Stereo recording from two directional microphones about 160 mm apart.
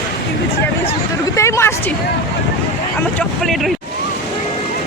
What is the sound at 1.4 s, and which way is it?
Speech, 15° left (ahead or behind).